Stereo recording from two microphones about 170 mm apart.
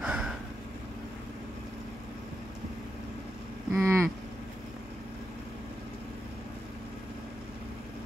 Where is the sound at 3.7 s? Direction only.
15° right (ahead or behind).